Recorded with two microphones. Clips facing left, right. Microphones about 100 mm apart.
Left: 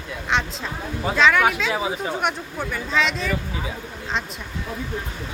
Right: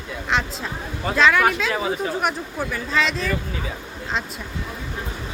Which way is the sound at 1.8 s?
15° left (ahead or behind).